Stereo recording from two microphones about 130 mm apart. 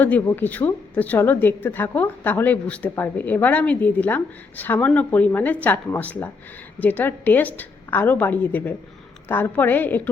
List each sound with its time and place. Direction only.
0.0 s a woman's voice: 15° left (ahead or behind)